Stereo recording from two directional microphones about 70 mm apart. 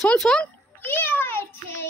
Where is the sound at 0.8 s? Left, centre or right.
Left.